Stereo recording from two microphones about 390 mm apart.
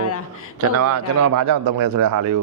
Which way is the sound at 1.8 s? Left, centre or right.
Right.